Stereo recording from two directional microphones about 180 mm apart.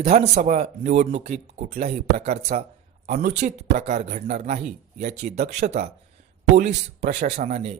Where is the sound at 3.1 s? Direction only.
50° right (ahead or behind).